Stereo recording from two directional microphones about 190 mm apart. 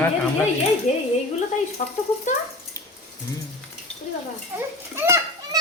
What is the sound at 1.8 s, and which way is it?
Speech, 40° left (ahead or behind).